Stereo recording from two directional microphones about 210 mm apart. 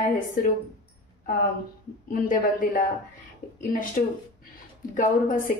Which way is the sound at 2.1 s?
40° left (ahead or behind).